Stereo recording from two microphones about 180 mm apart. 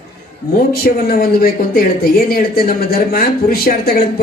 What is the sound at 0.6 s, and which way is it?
Speech, 55° left (ahead or behind).